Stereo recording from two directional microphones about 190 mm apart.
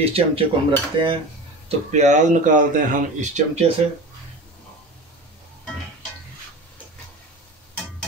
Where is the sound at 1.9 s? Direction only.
40° right (ahead or behind).